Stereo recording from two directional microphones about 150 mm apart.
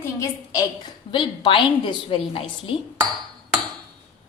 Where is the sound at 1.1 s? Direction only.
35° left (ahead or behind).